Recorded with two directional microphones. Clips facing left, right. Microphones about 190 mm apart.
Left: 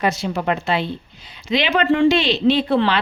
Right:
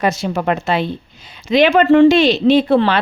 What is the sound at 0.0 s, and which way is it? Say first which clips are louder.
Speech: right 3 dB; 45° right (ahead or behind).